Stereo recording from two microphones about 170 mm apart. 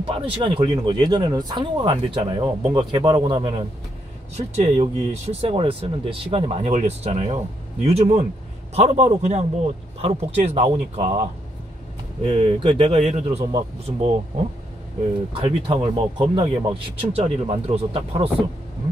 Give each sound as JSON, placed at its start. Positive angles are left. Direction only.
{"t": 0.0, "sound": "speech", "side_deg": -30}
{"t": 12.2, "sound": "speech", "side_deg": -35}
{"t": 15.4, "sound": "speech", "side_deg": -30}